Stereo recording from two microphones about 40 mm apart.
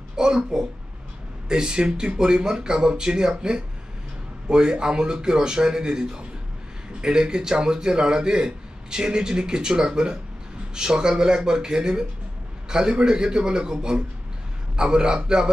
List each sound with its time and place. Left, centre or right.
0.1 s a woman's voice: centre